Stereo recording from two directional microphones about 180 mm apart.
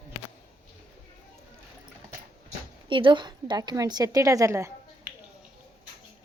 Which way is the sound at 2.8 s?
25° right (ahead or behind).